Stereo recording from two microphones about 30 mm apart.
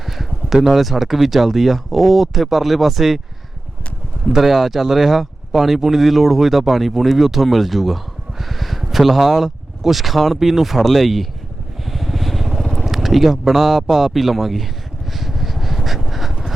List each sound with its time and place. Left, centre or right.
0.0 s a sound: centre
0.7 s speech: centre
4.3 s speech: centre
11.9 s vehicle: centre
12.9 s a sound: centre
13.5 s speech: centre
15.1 s vehicle: centre